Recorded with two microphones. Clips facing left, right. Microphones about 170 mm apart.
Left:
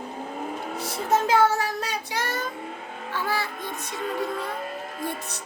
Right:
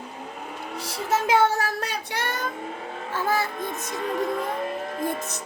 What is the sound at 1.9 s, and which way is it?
Child singing, 55° right (ahead or behind).